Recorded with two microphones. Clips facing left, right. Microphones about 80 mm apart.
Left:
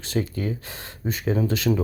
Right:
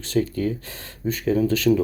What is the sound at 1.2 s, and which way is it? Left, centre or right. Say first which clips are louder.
Speech: right 4 dB; left.